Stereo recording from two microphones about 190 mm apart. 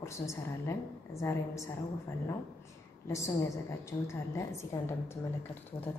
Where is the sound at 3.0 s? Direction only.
15° left (ahead or behind).